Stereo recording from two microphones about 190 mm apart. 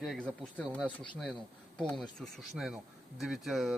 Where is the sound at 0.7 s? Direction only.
5° right (ahead or behind).